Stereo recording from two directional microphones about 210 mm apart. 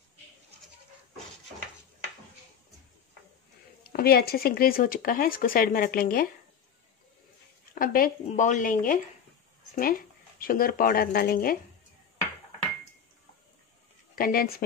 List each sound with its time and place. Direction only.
3.8 s speech: 45° left (ahead or behind)
7.7 s speech: 45° left (ahead or behind)
14.1 s speech: 45° left (ahead or behind)